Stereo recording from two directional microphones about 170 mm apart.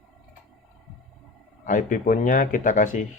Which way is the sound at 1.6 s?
55° left (ahead or behind).